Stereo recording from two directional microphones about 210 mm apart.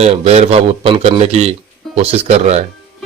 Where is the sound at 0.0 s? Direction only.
30° right (ahead or behind).